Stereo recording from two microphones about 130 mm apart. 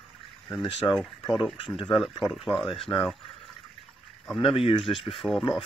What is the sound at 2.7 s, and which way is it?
Speech, 45° left (ahead or behind).